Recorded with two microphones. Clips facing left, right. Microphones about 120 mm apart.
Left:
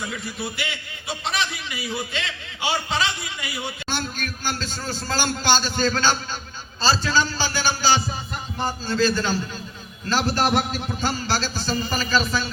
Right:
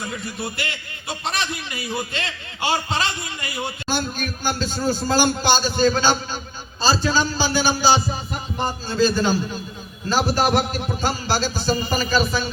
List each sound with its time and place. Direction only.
1.0 s a man's voice: 45° right (ahead or behind)
3.8 s a man's voice: 10° right (ahead or behind)